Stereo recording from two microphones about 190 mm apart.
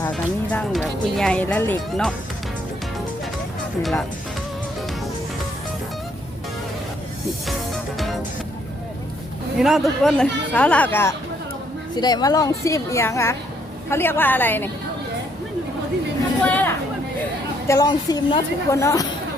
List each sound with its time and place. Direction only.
0.0 s speech: 5° left (ahead or behind)
7.9 s music: centre (ahead or behind)
9.6 s speech: centre (ahead or behind)
11.9 s a woman's voice: 20° left (ahead or behind)
16.5 s chatter: 10° left (ahead or behind)
17.7 s a woman's voice: 20° left (ahead or behind)